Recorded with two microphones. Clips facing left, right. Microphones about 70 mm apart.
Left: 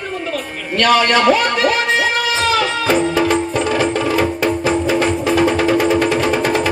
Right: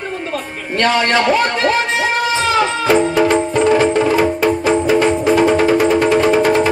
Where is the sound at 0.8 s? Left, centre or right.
Right.